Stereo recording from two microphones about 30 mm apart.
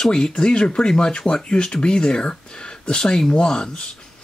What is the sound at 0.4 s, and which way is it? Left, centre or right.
Speech, left.